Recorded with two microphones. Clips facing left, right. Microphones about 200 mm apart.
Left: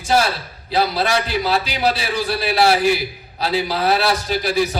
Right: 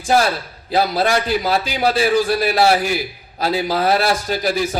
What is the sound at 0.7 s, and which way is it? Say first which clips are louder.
A man's voice: right 2 dB; 50° right (ahead or behind).